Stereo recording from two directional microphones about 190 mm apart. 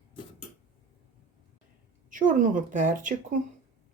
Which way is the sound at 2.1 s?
45° right (ahead or behind).